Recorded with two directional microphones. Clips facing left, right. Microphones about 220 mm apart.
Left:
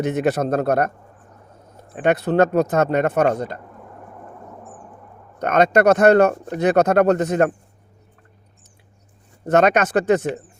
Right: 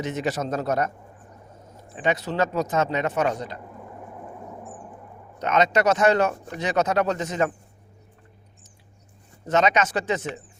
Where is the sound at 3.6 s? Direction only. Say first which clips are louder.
Right 1 dB; 5° right (ahead or behind).